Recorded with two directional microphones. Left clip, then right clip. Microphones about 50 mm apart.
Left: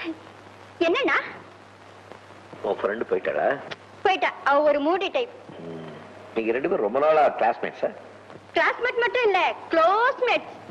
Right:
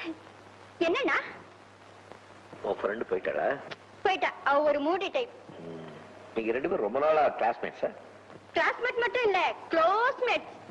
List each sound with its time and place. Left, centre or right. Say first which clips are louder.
0.7 s a woman's voice: left 5 dB; right
2.5 s a woman's voice: left 5 dB; right